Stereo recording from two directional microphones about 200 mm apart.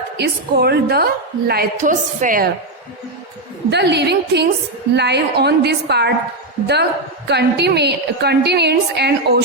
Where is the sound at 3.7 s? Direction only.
55° right (ahead or behind).